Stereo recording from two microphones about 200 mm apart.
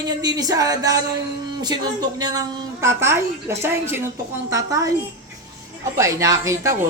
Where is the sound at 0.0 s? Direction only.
20° right (ahead or behind).